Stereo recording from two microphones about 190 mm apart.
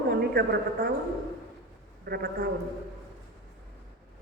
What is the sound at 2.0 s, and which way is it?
Speech, 55° right (ahead or behind).